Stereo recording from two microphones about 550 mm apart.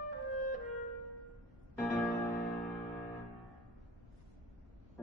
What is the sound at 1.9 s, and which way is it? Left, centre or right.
Music, centre.